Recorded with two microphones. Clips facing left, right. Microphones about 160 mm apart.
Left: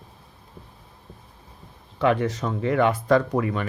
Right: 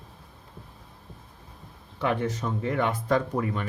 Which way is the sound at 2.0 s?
90° left.